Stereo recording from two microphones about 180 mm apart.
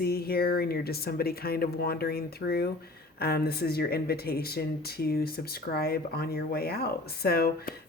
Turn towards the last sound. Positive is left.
turn(degrees=55)  # may be behind; listen again after turning